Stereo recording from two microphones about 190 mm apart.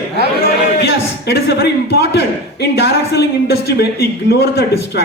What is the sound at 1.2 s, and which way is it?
Speech, 60° left (ahead or behind).